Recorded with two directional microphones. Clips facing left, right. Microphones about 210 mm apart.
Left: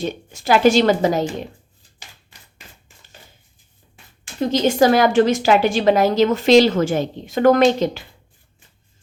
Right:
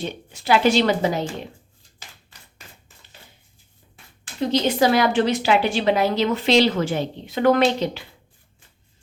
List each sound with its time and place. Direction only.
0.0 s a woman's voice: 45° left (ahead or behind)
4.4 s a woman's voice: 45° left (ahead or behind)